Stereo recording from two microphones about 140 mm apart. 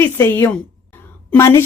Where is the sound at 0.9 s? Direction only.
15° left (ahead or behind).